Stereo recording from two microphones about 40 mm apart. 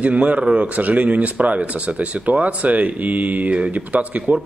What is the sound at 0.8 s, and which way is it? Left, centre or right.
Speech, right.